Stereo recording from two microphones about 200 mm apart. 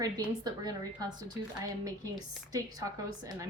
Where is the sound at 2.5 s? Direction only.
15° right (ahead or behind).